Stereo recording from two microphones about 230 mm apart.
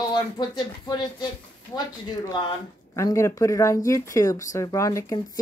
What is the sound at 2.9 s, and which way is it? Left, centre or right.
Speech, centre.